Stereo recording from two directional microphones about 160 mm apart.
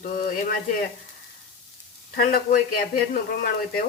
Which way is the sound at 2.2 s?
65° left (ahead or behind).